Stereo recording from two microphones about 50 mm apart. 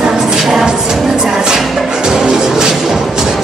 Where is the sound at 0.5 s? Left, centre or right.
Centre.